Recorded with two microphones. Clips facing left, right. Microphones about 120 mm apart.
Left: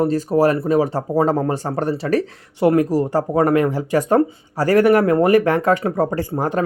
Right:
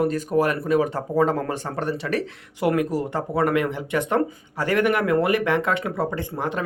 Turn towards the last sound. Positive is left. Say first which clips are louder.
# left 6 dB
turn(degrees=40)  # may be behind; listen again after turning